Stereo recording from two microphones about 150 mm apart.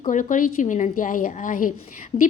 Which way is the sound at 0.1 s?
60° left (ahead or behind).